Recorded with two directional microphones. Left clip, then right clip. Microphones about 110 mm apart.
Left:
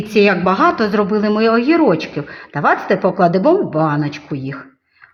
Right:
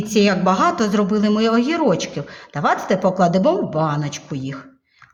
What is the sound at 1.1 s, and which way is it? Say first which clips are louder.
Speech: left 4 dB; 40° left (ahead or behind).